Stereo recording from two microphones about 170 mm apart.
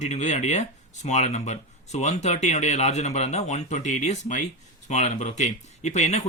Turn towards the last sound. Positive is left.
turn(degrees=40)  # may be behind; listen again after turning